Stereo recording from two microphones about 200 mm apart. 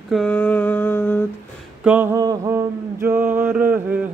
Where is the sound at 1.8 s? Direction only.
10° right (ahead or behind).